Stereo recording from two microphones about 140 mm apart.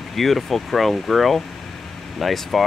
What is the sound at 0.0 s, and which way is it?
Speech, centre (ahead or behind).